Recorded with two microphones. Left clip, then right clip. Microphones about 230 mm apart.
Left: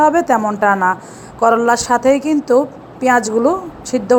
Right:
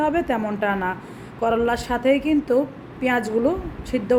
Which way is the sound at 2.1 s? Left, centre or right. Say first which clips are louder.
Left 5 dB; left.